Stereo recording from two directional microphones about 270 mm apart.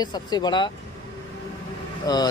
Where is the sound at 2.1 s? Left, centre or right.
Centre.